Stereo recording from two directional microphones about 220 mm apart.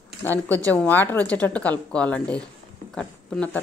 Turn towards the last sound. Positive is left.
turn(degrees=5)  # may be behind; listen again after turning